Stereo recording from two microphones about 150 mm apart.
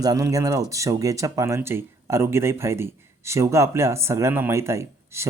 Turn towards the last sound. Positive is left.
turn(degrees=-20)  # may be behind; listen again after turning